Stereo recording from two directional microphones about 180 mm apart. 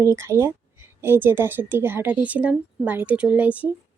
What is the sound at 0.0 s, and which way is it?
A woman's voice, 15° right (ahead or behind).